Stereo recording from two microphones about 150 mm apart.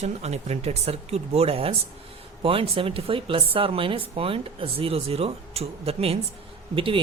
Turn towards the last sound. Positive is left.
turn(degrees=-35)  # may be behind; listen again after turning